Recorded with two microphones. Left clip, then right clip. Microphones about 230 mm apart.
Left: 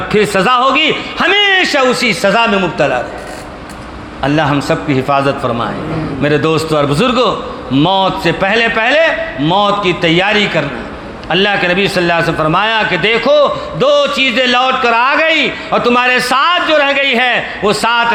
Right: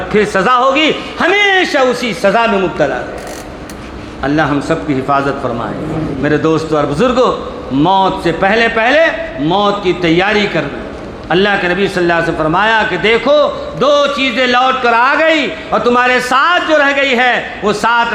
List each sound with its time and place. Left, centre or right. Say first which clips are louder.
0.1 s a man's voice: even; left
4.2 s a man's voice: left 1 dB; left